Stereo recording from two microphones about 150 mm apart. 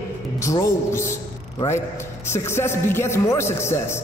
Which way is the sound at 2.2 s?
15° left (ahead or behind).